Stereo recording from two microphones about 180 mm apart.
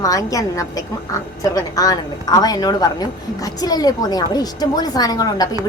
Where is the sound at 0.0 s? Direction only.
20° left (ahead or behind).